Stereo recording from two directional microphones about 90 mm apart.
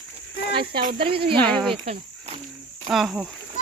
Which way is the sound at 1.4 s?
5° left (ahead or behind).